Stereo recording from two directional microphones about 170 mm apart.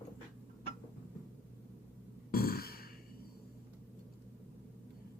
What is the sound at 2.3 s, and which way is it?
Sigh, 65° left (ahead or behind).